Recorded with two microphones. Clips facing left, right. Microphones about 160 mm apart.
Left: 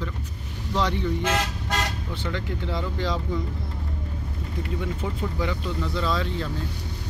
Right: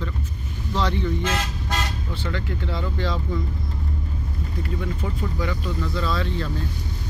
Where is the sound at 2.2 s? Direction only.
15° left (ahead or behind).